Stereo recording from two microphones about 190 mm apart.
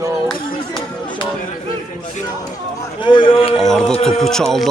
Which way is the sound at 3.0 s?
25° left (ahead or behind).